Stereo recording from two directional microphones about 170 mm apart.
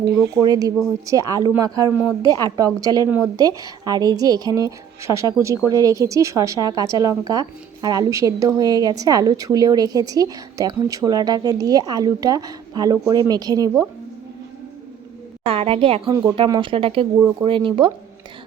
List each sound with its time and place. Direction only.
0.0 s speech: 20° right (ahead or behind)
15.4 s a woman's voice: 35° right (ahead or behind)